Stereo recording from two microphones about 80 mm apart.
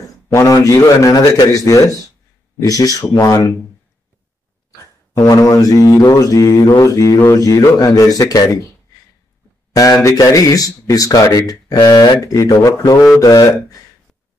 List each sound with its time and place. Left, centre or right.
0.0 s speech: left
5.1 s speech: left
9.7 s a sound: left
10.0 s speech: left